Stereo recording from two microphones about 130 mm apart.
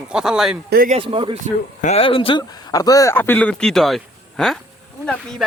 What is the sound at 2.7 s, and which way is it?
Speech, 30° left (ahead or behind).